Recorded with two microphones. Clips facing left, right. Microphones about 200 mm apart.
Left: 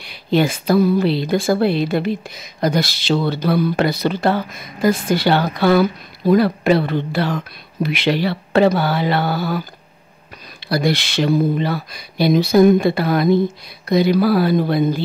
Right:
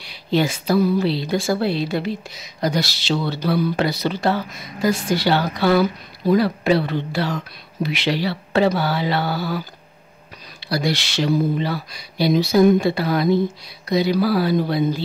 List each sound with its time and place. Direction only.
0.0 s speech: 55° left (ahead or behind)
10.7 s speech: 55° left (ahead or behind)